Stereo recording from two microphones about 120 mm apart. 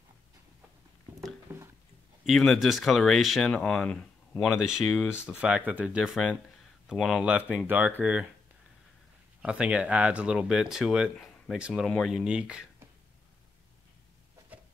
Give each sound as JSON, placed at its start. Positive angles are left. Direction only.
{"t": 1.5, "sound": "a sound", "side_deg": -15}
{"t": 2.2, "sound": "speech", "side_deg": 0}
{"t": 9.4, "sound": "speech", "side_deg": -10}